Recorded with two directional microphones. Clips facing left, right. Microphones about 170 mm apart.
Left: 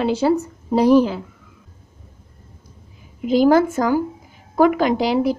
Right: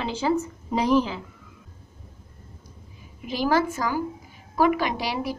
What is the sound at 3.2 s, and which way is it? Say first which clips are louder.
Speech: left 9 dB; 50° left (ahead or behind).